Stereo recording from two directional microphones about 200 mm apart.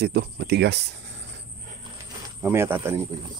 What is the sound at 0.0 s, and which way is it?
Speech, 55° right (ahead or behind).